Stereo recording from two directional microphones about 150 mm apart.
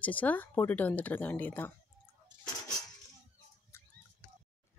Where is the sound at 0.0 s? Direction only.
10° left (ahead or behind).